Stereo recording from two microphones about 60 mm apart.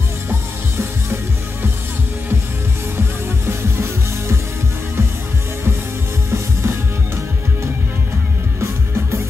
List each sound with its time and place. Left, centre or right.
3.4 s music: right
6.3 s music: right